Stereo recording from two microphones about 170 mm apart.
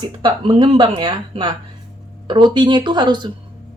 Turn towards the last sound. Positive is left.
turn(degrees=-25)  # may be behind; listen again after turning